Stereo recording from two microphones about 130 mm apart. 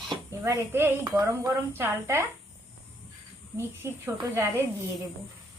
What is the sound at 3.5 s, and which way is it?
Speech, 20° right (ahead or behind).